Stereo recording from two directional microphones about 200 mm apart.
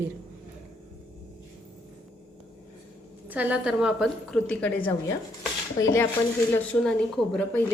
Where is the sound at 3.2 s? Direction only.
10° right (ahead or behind); by 4.9 s 10° left (ahead or behind).